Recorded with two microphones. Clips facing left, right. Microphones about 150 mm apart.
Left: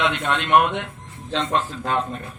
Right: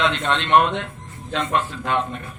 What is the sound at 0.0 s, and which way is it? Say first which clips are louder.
Speech: right 1 dB; 10° left (ahead or behind).